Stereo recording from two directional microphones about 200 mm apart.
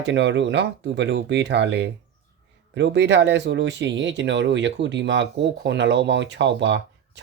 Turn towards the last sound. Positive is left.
turn(degrees=-60)  # may be behind; listen again after turning